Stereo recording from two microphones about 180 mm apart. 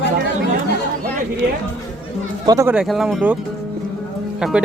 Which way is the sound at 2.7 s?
Centre (ahead or behind).